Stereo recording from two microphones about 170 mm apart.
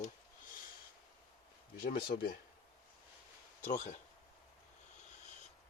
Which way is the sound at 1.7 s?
65° left (ahead or behind).